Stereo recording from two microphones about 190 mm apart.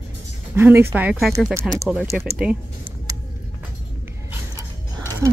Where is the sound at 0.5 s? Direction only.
10° right (ahead or behind).